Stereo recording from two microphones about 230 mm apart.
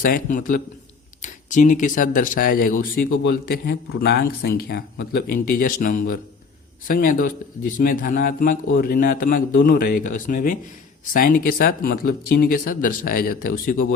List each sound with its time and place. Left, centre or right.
0.0 s speech: left